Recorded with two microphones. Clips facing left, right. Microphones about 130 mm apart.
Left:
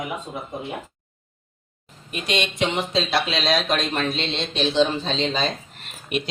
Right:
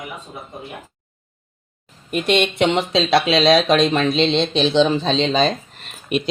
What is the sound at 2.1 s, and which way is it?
Speech, 55° right (ahead or behind).